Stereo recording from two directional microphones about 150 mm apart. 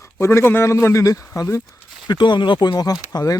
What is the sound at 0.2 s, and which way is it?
A man's voice, 15° left (ahead or behind).